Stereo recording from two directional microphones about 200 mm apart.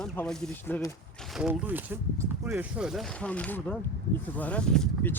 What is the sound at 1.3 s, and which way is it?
Speech, 5° right (ahead or behind).